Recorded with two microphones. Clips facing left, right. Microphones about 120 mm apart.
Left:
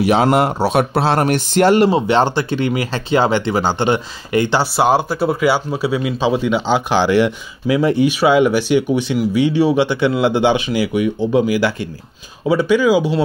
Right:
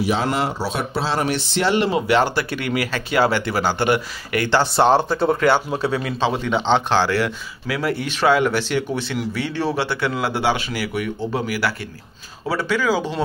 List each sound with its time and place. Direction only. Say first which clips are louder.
0.0 s speech: left 7 dB; 65° left (ahead or behind); by 1.9 s 45° left (ahead or behind)
1.9 s speech: left 3 dB; 30° left (ahead or behind)
4.6 s speech: left 1 dB; 5° left (ahead or behind)
7.0 s speech: left 6 dB; 20° left (ahead or behind)